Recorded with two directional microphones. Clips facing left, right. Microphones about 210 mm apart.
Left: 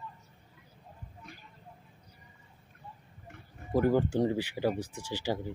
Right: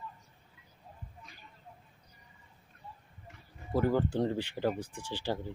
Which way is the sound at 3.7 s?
15° left (ahead or behind).